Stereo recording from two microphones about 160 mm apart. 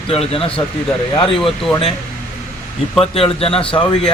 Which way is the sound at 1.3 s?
Centre (ahead or behind).